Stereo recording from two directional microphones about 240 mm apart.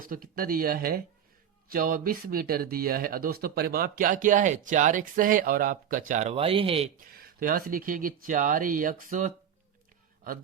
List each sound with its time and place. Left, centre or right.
0.0 s speech: right